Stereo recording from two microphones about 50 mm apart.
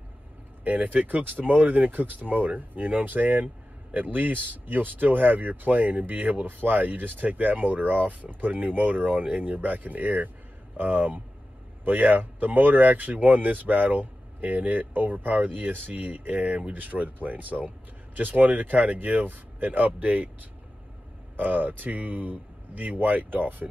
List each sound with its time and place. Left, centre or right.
0.7 s speech: right
21.4 s speech: right